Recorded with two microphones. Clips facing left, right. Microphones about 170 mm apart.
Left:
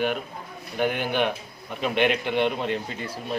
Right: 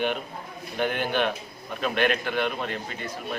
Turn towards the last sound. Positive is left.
turn(degrees=30)  # may be behind; listen again after turning